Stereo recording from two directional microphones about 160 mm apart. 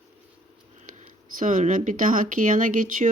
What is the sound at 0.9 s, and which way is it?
Speech, 50° right (ahead or behind).